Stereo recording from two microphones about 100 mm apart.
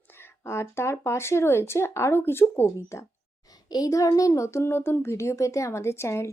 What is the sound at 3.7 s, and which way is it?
Speech, 35° left (ahead or behind).